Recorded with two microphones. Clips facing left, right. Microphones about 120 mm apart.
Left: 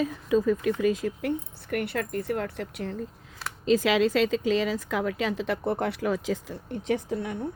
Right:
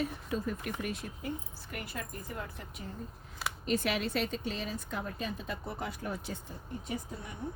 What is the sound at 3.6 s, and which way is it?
A woman's voice, 90° left.